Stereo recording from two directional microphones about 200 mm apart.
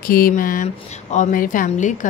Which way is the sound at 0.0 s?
45° left (ahead or behind).